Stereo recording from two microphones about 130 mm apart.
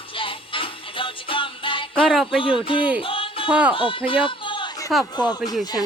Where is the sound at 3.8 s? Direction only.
40° left (ahead or behind).